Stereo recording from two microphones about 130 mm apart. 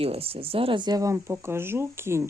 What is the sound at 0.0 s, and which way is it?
Speech, 50° right (ahead or behind).